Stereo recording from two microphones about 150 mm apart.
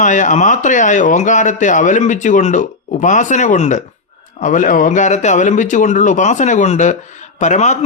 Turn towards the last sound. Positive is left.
turn(degrees=50)  # may be behind; listen again after turning